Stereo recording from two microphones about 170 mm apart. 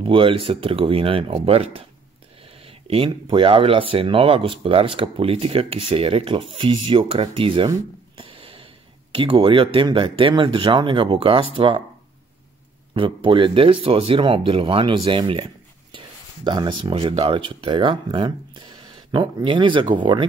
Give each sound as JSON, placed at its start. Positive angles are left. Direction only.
{"t": 0.0, "sound": "speech", "side_deg": -30}
{"t": 12.9, "sound": "speech", "side_deg": -30}